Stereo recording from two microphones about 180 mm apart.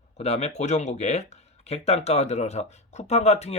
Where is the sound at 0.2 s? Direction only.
35° left (ahead or behind).